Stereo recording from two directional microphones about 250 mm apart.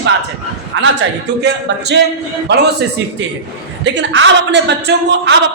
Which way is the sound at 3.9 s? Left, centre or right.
Right.